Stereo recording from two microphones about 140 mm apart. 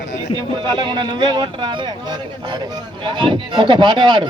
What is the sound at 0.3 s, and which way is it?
Speech, 30° right (ahead or behind).